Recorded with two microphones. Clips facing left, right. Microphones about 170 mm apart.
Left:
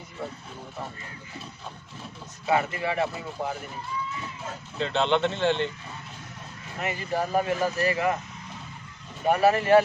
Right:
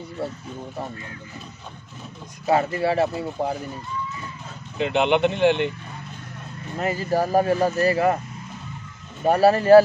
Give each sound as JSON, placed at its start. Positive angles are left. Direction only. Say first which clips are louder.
{"t": 2.4, "sound": "speech", "louder": "right 5 dB", "side_deg": -35}
{"t": 4.7, "sound": "speech", "louder": "right 4 dB", "side_deg": -15}
{"t": 6.8, "sound": "speech", "louder": "right 6 dB", "side_deg": -35}
{"t": 9.2, "sound": "speech", "louder": "right 4 dB", "side_deg": -35}